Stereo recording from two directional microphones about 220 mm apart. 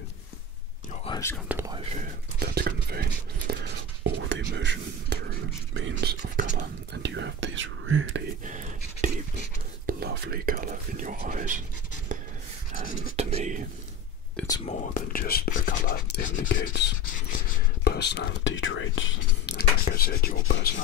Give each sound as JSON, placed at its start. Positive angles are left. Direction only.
{"t": 1.0, "sound": "whispering", "side_deg": 20}
{"t": 1.5, "sound": "speech", "side_deg": -10}
{"t": 2.3, "sound": "speech", "side_deg": -45}
{"t": 8.5, "sound": "whispering", "side_deg": -35}
{"t": 9.8, "sound": "speech", "side_deg": -45}
{"t": 13.1, "sound": "speech", "side_deg": -30}
{"t": 14.6, "sound": "speech", "side_deg": 40}